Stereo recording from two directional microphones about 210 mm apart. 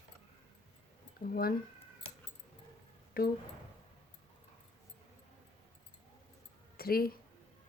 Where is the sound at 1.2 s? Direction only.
45° left (ahead or behind).